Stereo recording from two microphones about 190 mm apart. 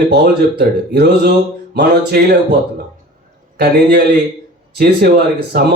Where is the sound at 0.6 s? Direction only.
55° right (ahead or behind).